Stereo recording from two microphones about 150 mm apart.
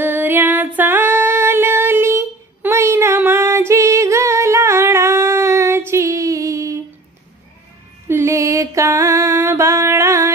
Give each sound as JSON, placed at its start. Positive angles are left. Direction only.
{"t": 0.0, "sound": "female singing", "side_deg": -15}
{"t": 8.1, "sound": "mantra", "side_deg": -20}